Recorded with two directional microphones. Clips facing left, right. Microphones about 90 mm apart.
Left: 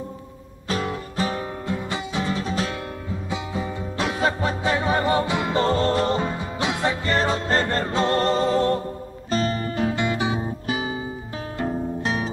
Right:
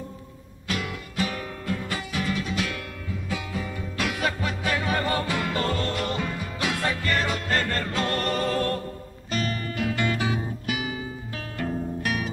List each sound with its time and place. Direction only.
0.7 s music: 35° left (ahead or behind)